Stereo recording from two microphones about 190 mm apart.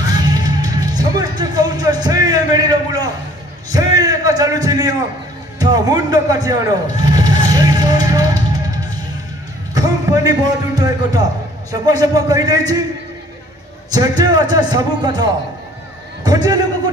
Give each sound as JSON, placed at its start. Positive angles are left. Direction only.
{"t": 0.2, "sound": "music", "side_deg": -20}
{"t": 3.7, "sound": "a sound", "side_deg": -20}
{"t": 5.6, "sound": "a man's voice", "side_deg": -20}
{"t": 13.9, "sound": "a man's voice", "side_deg": -20}
{"t": 16.3, "sound": "a man's voice", "side_deg": -20}